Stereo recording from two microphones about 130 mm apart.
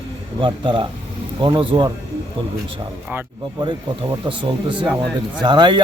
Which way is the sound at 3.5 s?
40° right (ahead or behind).